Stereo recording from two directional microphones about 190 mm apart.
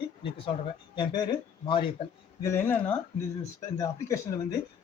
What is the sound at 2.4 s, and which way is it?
Speech, 10° left (ahead or behind).